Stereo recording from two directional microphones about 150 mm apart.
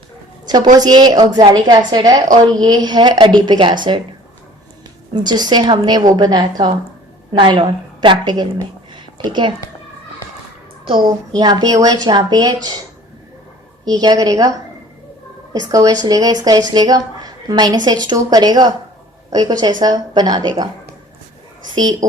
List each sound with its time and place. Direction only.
0.4 s a woman's voice: 30° right (ahead or behind)
5.1 s a woman's voice: 30° right (ahead or behind)
8.9 s a sound: 30° right (ahead or behind)
11.3 s a woman's voice: 25° right (ahead or behind)
13.8 s a woman's voice: 25° right (ahead or behind)
15.5 s a woman's voice: 25° right (ahead or behind)